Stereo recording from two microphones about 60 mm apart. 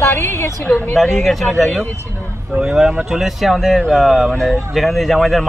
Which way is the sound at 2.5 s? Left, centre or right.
Centre.